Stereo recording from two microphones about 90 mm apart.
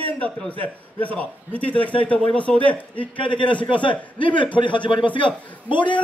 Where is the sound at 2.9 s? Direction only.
65° left (ahead or behind).